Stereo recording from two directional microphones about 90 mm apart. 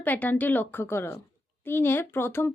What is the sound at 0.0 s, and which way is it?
Speech, 20° left (ahead or behind).